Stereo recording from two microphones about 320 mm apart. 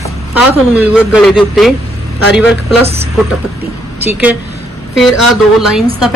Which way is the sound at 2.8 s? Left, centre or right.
Centre.